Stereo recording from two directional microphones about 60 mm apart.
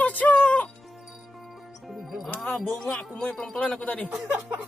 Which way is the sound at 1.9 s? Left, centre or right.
Centre.